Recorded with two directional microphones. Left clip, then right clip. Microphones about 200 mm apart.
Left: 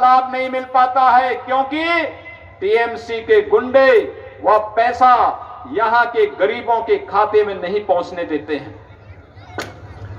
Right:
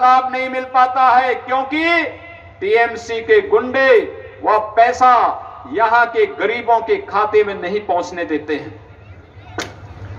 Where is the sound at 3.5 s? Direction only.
40° left (ahead or behind).